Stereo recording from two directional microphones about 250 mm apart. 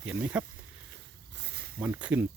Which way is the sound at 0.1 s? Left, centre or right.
Centre.